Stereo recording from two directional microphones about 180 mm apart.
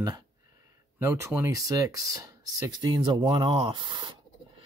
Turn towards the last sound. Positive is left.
turn(degrees=-25)  # may be behind; listen again after turning